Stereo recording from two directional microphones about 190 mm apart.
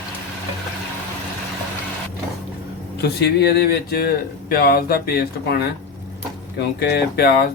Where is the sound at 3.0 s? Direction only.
60° left (ahead or behind).